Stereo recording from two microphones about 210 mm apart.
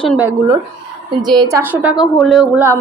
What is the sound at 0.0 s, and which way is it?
Speech, centre (ahead or behind).